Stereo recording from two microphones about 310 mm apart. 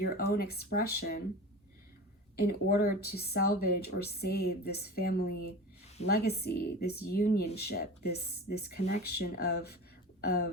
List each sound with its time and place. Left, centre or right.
0.2 s speech: left
2.3 s speech: left